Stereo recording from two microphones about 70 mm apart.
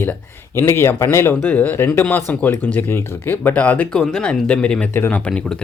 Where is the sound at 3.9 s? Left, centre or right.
Centre.